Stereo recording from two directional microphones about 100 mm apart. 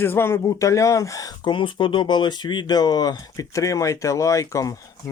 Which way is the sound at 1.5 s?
55° left (ahead or behind).